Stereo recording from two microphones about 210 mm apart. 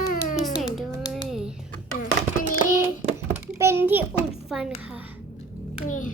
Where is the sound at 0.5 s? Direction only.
Centre (ahead or behind).